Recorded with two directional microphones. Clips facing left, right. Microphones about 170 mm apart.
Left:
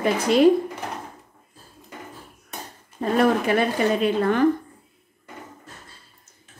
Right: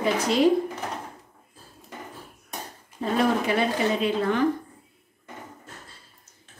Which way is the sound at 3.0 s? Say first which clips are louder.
Left 3 dB; 55° left (ahead or behind).